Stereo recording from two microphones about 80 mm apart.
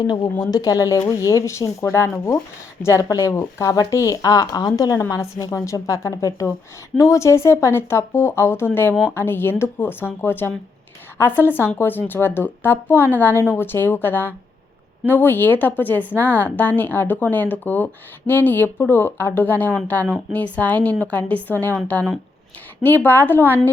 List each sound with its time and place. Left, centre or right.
0.0 s a woman's voice: left